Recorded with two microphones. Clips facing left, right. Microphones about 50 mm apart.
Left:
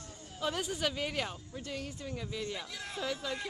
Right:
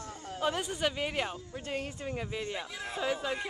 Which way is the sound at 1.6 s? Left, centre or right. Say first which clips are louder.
Right 4 dB; right.